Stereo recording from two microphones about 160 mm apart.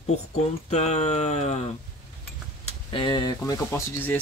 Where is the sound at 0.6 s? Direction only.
45° left (ahead or behind).